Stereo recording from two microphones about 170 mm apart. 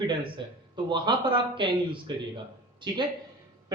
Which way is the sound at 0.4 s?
30° right (ahead or behind).